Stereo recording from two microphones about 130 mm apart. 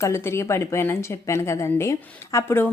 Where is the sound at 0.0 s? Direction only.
20° left (ahead or behind).